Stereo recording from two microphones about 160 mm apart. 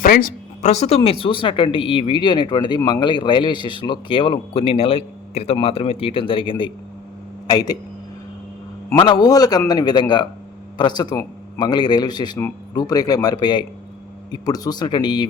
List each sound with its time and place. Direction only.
0.0 s a sound: 60° left (ahead or behind)
0.7 s a man's voice: 40° left (ahead or behind); by 7.8 s 25° left (ahead or behind)
9.0 s speech: 25° left (ahead or behind)